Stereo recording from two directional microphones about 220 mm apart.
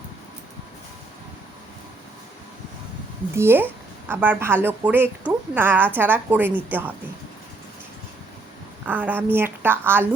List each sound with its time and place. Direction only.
3.3 s a woman's voice: 10° right (ahead or behind)
8.9 s a woman's voice: 10° right (ahead or behind)